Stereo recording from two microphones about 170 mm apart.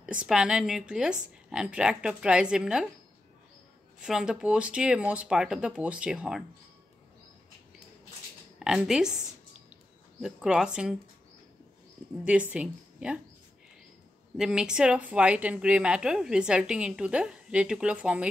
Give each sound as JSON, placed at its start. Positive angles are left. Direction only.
{"t": 0.0, "sound": "a woman's voice", "side_deg": -5}
{"t": 4.0, "sound": "a woman's voice", "side_deg": -5}
{"t": 8.5, "sound": "a woman's voice", "side_deg": -5}
{"t": 10.2, "sound": "a woman's voice", "side_deg": -5}
{"t": 12.3, "sound": "a woman's voice", "side_deg": -5}
{"t": 14.3, "sound": "a woman's voice", "side_deg": -5}